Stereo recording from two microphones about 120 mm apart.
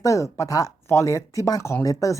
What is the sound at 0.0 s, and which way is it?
A woman's voice, 25° left (ahead or behind).